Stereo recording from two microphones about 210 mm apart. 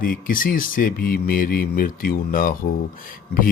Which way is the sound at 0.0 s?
40° left (ahead or behind).